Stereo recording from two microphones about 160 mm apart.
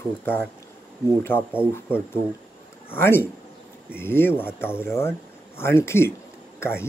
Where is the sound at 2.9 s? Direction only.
15° left (ahead or behind).